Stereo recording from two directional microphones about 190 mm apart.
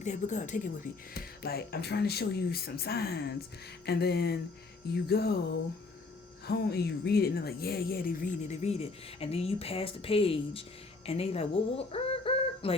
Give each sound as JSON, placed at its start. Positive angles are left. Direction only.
{"t": 0.0, "sound": "a woman's voice", "side_deg": 40}
{"t": 1.1, "sound": "speech", "side_deg": 55}
{"t": 6.5, "sound": "a woman's voice", "side_deg": 55}